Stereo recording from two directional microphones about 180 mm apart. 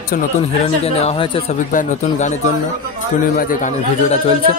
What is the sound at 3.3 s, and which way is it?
Speech, 45° left (ahead or behind).